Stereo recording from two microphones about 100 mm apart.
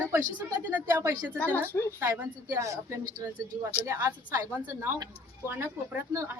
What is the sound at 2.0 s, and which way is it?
A woman's voice, 35° right (ahead or behind).